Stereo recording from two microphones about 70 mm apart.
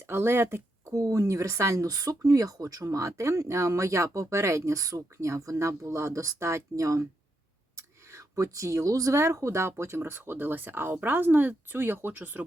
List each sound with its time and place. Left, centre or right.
0.0 s speech: right
0.9 s speech: right
7.8 s a sound: right
9.1 s speech: right